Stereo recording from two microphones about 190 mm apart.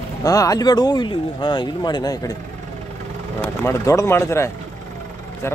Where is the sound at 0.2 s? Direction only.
20° left (ahead or behind).